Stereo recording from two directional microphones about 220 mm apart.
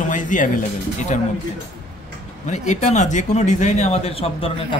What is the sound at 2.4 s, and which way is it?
Speech, 30° left (ahead or behind).